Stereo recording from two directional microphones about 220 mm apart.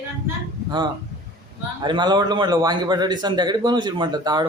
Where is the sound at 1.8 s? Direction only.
20° right (ahead or behind).